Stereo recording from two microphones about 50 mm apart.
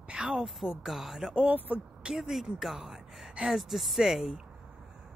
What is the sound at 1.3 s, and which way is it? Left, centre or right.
Speech, right.